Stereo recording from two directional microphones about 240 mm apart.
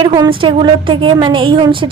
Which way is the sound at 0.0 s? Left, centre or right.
Centre.